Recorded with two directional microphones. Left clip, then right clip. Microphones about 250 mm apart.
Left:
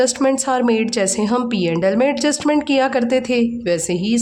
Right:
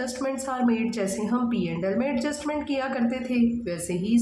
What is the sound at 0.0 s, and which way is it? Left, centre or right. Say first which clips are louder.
A woman's voice: left 13 dB; left.